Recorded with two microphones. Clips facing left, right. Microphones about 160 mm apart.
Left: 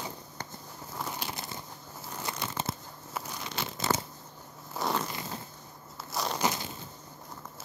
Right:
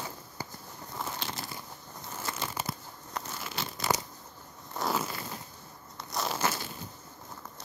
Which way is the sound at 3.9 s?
15° right (ahead or behind).